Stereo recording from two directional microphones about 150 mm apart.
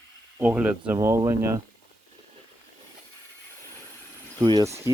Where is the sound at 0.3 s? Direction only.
10° right (ahead or behind).